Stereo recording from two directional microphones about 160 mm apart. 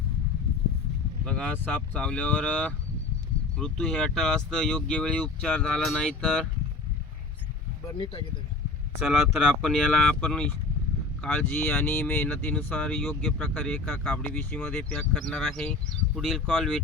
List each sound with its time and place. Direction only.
1.2 s speech: 5° left (ahead or behind)
7.9 s speech: 30° left (ahead or behind)
9.6 s speech: centre (ahead or behind)